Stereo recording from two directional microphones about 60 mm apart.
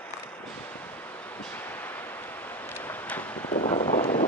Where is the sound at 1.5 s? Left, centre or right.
Left.